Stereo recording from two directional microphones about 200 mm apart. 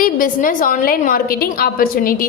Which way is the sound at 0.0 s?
45° left (ahead or behind).